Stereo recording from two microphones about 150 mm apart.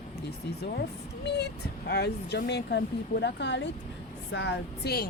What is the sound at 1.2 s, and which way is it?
Speech, 90° left.